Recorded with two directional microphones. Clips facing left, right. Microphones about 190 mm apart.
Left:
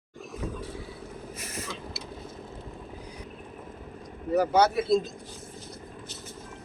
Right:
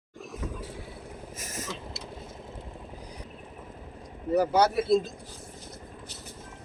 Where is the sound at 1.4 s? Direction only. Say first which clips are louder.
Even; 45° right (ahead or behind).